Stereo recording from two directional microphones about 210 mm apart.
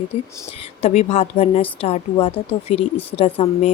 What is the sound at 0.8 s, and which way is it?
Speech, 30° left (ahead or behind).